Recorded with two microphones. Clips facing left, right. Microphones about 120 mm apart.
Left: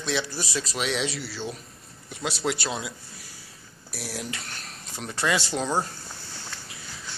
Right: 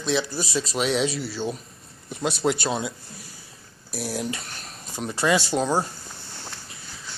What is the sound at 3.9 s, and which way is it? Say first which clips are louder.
Speech: right 6 dB; 20° right (ahead or behind).